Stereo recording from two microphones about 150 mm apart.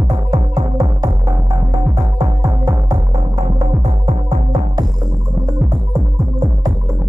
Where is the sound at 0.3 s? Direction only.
25° right (ahead or behind).